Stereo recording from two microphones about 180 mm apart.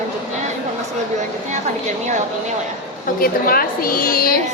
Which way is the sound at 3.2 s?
55° left (ahead or behind).